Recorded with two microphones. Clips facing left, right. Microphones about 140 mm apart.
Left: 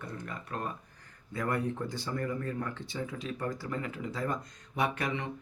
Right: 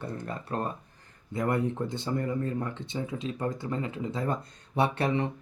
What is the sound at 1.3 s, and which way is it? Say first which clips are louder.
Speech: right 4 dB; 20° right (ahead or behind).